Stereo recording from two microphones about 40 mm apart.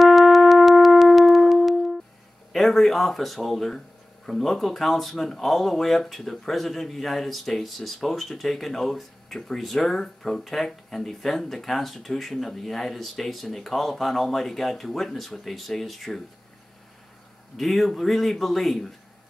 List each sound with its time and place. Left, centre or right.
0.0 s music: centre
2.5 s speech: centre
17.6 s speech: centre